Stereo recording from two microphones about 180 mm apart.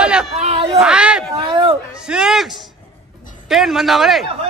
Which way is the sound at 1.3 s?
25° right (ahead or behind).